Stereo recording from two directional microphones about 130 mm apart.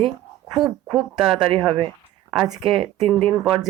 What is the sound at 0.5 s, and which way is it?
Speech, centre (ahead or behind).